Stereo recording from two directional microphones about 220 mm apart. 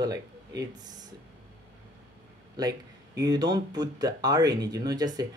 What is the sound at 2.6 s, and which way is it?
Speech, 20° right (ahead or behind).